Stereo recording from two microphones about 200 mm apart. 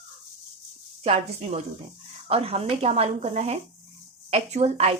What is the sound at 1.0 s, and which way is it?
Speech, 30° right (ahead or behind).